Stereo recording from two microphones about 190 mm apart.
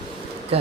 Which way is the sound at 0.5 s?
30° right (ahead or behind).